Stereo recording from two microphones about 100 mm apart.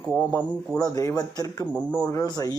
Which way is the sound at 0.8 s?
40° left (ahead or behind).